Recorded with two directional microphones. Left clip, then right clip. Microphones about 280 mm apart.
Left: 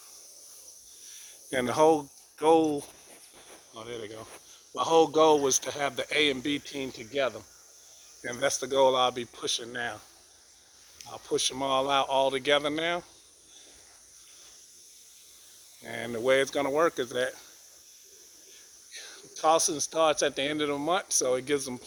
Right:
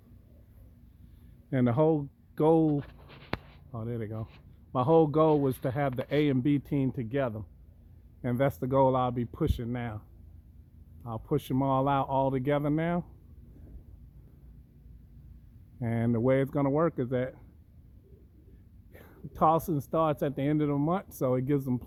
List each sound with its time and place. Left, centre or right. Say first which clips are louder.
1.5 s speech: left 3 dB; centre
3.8 s speech: right 1 dB; centre
11.3 s speech: left 2 dB; centre
15.9 s speech: left 1 dB; centre
18.9 s speech: left 7 dB; centre